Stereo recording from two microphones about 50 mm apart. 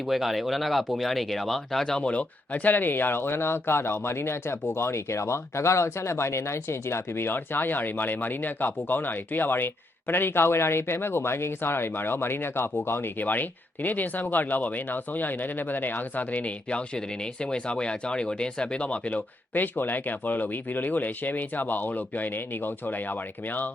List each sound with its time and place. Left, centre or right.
0.0 s speech: centre
2.0 s speech: left
19.5 s speech: left